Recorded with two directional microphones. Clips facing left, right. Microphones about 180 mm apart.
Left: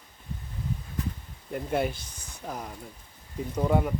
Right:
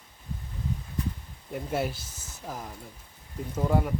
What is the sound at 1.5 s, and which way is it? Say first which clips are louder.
Speech: left 2 dB; 5° right (ahead or behind).